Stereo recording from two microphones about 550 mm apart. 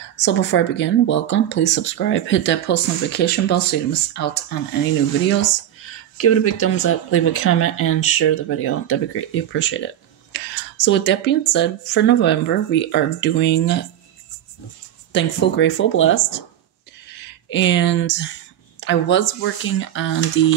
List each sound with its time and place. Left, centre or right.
0.1 s speech: centre
15.1 s speech: centre